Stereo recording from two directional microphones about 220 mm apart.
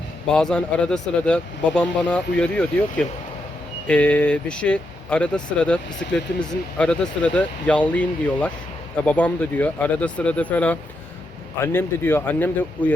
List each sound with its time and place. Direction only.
0.3 s speech: 5° left (ahead or behind)